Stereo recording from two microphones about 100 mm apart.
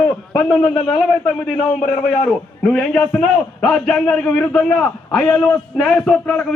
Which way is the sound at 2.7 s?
10° left (ahead or behind).